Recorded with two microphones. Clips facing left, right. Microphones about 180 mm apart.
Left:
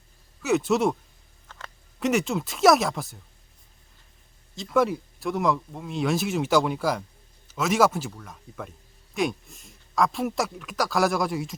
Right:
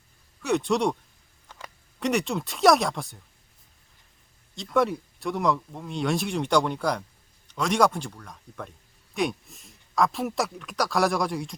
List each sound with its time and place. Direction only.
0.4 s speech: 5° left (ahead or behind)
1.5 s a sound: 10° right (ahead or behind)
2.0 s speech: centre (ahead or behind)
4.5 s speech: centre (ahead or behind)